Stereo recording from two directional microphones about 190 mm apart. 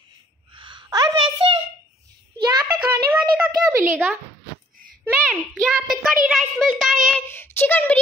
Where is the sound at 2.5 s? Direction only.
15° right (ahead or behind).